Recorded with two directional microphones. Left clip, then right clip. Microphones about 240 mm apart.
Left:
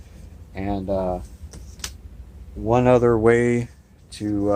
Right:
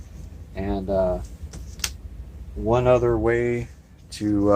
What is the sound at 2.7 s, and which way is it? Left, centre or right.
Speech, left.